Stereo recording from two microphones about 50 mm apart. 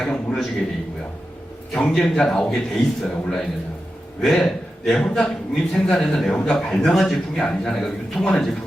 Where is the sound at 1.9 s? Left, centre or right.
Centre.